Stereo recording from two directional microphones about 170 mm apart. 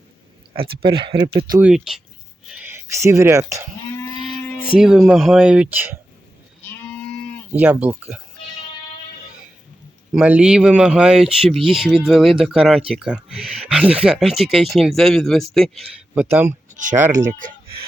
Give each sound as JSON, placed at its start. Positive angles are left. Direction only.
{"t": 0.5, "sound": "speech", "side_deg": -30}
{"t": 1.5, "sound": "speech", "side_deg": -5}
{"t": 4.8, "sound": "speech", "side_deg": -5}
{"t": 7.5, "sound": "speech", "side_deg": -10}
{"t": 10.1, "sound": "speech", "side_deg": -5}
{"t": 16.3, "sound": "speech", "side_deg": -10}
{"t": 17.1, "sound": "speech", "side_deg": -45}